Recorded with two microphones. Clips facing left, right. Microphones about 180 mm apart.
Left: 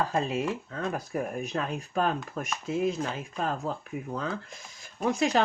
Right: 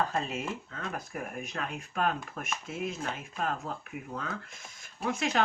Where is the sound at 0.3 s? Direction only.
35° left (ahead or behind).